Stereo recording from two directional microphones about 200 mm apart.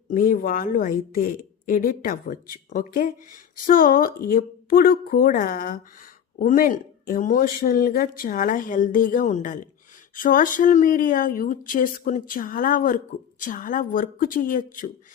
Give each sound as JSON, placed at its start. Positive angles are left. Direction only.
{"t": 0.1, "sound": "speech", "side_deg": 45}